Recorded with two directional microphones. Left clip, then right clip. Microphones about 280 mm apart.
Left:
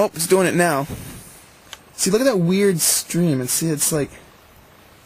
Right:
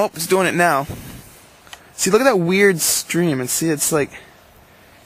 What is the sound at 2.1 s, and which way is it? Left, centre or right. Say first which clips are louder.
Speech: right 4 dB; centre.